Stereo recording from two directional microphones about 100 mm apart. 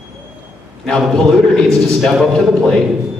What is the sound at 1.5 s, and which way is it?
A man's voice, centre (ahead or behind).